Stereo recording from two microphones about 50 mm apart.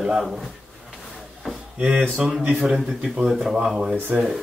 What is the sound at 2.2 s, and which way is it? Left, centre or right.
Speech, centre.